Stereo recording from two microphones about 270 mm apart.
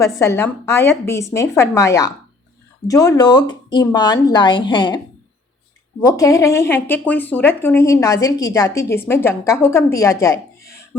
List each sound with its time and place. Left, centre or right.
0.0 s speech: centre
6.0 s speech: centre